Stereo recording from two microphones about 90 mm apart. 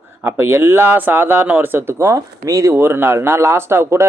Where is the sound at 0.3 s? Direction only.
30° right (ahead or behind).